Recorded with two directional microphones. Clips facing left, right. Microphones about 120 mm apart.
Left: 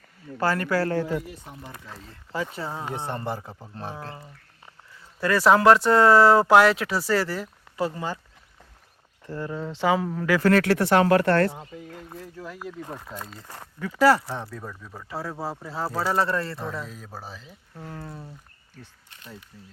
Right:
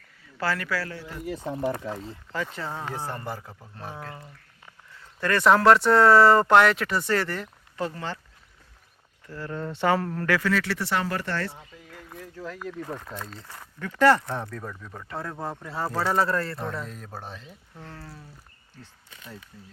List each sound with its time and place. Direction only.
0.3 s speech: 40° left (ahead or behind)
1.3 s speech: 90° right
2.3 s speech: 10° left (ahead or behind)
2.9 s speech: 25° left (ahead or behind)
5.2 s speech: 5° left (ahead or behind)
9.2 s speech: 30° left (ahead or behind)
9.5 s speech: centre (ahead or behind)
10.4 s speech: 50° left (ahead or behind); by 11.4 s 65° left (ahead or behind)
11.4 s speech: 50° left (ahead or behind)
11.9 s speech: 25° left (ahead or behind)
12.2 s speech: 10° left (ahead or behind)
18.0 s speech: 20° left (ahead or behind)